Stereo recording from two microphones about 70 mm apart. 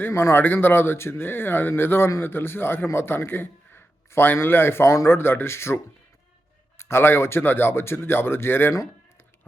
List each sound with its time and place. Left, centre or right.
0.0 s a man's voice: left